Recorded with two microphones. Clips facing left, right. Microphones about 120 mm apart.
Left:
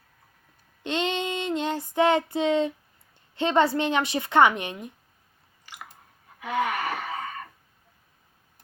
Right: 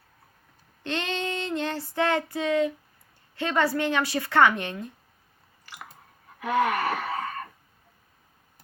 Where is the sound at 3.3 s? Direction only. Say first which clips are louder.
Left 3 dB; 20° left (ahead or behind).